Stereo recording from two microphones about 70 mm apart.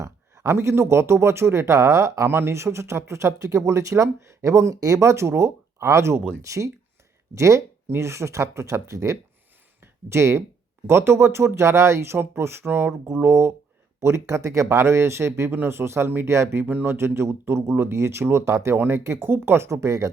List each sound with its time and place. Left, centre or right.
0.0 s speech: right
6.4 s speech: right
9.8 s a sound: right
10.8 s speech: right
16.6 s speech: right